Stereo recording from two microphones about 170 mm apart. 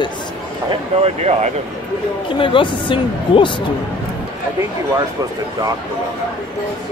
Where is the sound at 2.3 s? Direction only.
30° left (ahead or behind).